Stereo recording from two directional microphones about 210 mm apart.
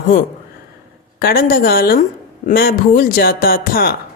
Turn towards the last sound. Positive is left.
turn(degrees=45)  # may be behind; listen again after turning